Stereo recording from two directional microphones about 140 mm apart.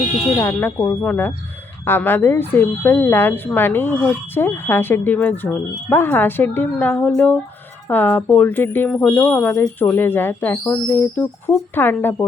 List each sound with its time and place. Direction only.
0.3 s speech: 15° left (ahead or behind)